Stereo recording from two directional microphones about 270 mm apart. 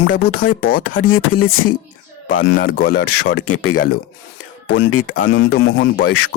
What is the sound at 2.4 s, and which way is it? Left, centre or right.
Speech, left.